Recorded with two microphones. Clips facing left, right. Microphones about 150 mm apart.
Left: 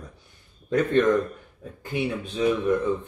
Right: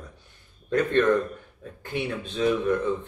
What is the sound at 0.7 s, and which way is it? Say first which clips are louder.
A man's voice: left 1 dB; 15° left (ahead or behind).